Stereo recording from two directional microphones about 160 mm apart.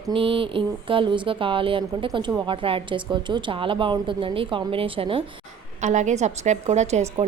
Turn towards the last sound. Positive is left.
turn(degrees=-45)  # may be behind; listen again after turning